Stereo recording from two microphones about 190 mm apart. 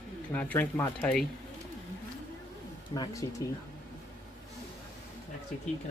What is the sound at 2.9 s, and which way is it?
Speech, 20° left (ahead or behind).